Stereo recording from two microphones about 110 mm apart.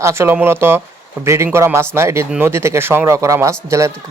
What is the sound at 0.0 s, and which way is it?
Speech, 25° right (ahead or behind).